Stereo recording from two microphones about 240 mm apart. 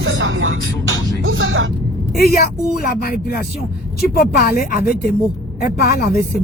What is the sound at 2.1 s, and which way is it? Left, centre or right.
Speech, left.